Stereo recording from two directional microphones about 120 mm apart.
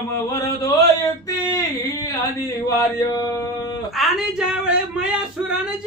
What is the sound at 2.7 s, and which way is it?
Mantra, 30° left (ahead or behind).